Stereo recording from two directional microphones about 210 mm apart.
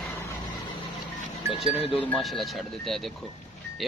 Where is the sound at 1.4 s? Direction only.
15° right (ahead or behind).